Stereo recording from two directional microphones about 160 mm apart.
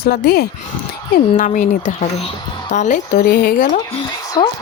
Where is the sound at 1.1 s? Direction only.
55° left (ahead or behind).